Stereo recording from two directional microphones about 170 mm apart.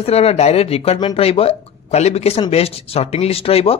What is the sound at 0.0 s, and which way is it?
Speech, 35° left (ahead or behind).